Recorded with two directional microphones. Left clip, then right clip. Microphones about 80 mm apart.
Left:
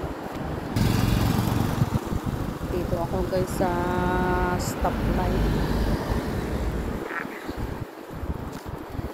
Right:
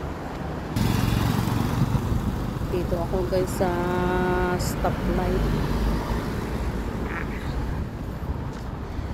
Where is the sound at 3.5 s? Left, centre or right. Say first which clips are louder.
Even; right.